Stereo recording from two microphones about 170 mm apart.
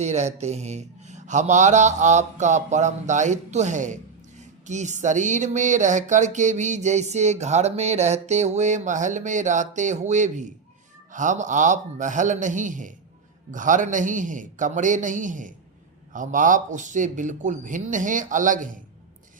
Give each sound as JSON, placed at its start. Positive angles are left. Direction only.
{"t": 0.0, "sound": "speech", "side_deg": -40}